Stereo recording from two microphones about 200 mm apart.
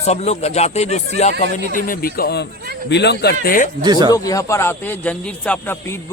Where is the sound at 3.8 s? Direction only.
20° right (ahead or behind).